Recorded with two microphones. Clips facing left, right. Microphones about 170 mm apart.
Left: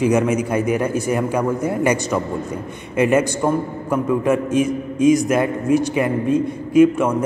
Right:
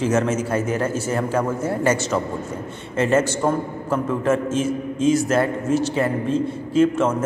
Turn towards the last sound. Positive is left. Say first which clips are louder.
# left 4 dB
turn(degrees=15)  # may be behind; listen again after turning